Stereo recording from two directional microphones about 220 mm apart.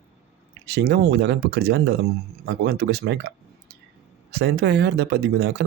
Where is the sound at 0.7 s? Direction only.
50° right (ahead or behind).